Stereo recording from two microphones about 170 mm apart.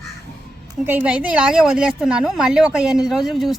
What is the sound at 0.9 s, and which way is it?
A woman's voice, 10° right (ahead or behind).